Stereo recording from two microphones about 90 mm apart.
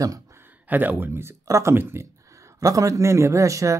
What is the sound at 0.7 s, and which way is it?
Speech, 20° right (ahead or behind).